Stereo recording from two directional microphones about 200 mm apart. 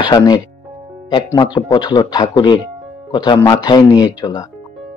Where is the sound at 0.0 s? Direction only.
20° left (ahead or behind).